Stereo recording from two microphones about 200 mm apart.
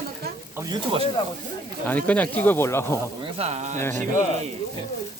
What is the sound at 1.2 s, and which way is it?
Speech, 25° left (ahead or behind).